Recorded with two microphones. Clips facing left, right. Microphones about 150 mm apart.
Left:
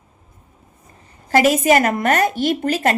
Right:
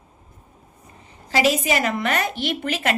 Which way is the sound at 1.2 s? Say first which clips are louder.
Left 6 dB; 50° left (ahead or behind).